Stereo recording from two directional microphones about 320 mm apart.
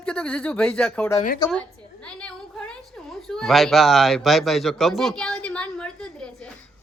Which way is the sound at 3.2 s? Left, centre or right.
Centre.